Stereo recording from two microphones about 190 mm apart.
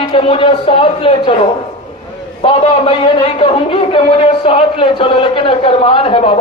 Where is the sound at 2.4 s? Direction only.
25° left (ahead or behind).